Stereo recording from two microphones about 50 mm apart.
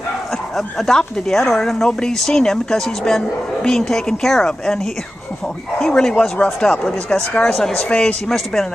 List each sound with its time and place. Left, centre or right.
0.6 s speech: centre
5.8 s speech: centre
7.5 s speech: centre
7.9 s speech: centre